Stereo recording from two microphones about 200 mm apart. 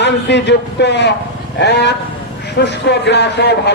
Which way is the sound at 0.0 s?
60° left (ahead or behind).